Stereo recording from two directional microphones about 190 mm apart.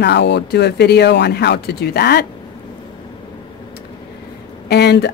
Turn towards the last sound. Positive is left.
turn(degrees=60)  # may be behind; listen again after turning